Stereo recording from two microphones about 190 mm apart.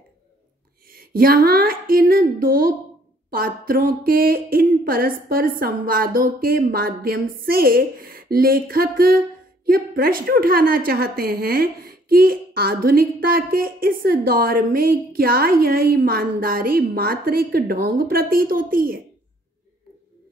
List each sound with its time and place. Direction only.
0.8 s a woman's voice: 50° right (ahead or behind)